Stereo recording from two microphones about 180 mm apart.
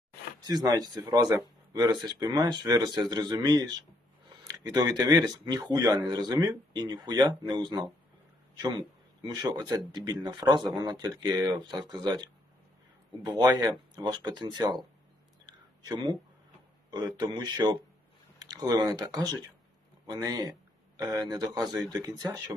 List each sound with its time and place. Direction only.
0.4 s speech: 20° right (ahead or behind)
15.4 s a sound: 20° right (ahead or behind)
16.9 s speech: 25° right (ahead or behind)